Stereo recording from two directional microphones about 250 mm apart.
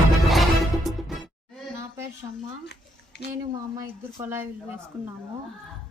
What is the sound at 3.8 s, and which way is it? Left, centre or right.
Speech, centre.